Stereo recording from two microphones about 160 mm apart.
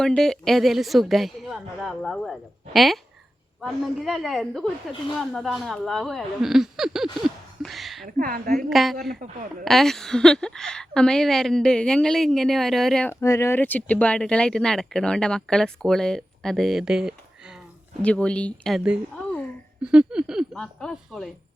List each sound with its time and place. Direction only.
0.0 s speech: 5° left (ahead or behind)
7.6 s a sound: centre (ahead or behind)
8.0 s a woman's voice: 65° right (ahead or behind)
8.7 s speech: centre (ahead or behind)
9.2 s a woman's voice: 55° right (ahead or behind)
9.6 s speech: centre (ahead or behind)
13.2 s speech: 20° left (ahead or behind); by 17.6 s 5° right (ahead or behind)
18.0 s speech: 10° left (ahead or behind)
19.1 s a sound: 10° left (ahead or behind)
19.8 s speech: 5° right (ahead or behind)